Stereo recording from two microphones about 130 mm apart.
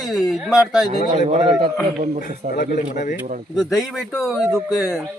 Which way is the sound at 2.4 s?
65° right (ahead or behind).